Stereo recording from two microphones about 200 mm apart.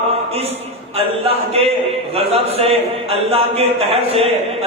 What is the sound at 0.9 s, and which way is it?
A man's voice, 30° right (ahead or behind).